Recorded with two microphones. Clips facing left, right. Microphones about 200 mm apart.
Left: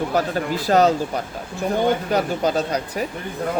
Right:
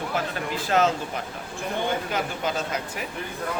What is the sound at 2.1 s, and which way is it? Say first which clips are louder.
Speech: left 7 dB; 35° left (ahead or behind).